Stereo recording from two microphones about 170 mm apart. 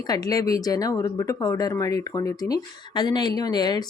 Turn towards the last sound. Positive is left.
turn(degrees=25)  # may be behind; listen again after turning